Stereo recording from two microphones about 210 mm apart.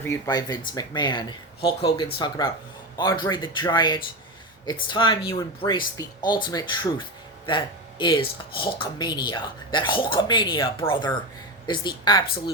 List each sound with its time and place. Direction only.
0.0 s speech: 15° left (ahead or behind)